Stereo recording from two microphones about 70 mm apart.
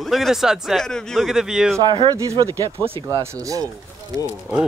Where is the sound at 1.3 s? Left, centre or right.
Centre.